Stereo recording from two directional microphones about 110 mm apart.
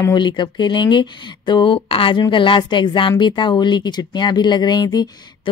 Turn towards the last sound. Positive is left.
turn(degrees=40)  # may be behind; listen again after turning